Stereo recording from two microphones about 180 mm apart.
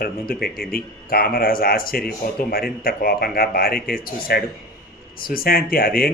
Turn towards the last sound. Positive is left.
turn(degrees=55)  # may be behind; listen again after turning